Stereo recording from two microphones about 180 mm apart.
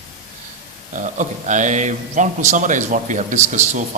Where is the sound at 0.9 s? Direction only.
45° right (ahead or behind).